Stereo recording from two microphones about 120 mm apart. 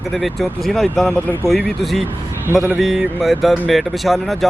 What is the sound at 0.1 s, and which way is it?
A man's voice, centre (ahead or behind).